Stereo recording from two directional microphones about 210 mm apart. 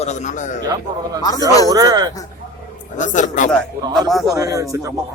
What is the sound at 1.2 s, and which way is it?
Speech, 15° left (ahead or behind).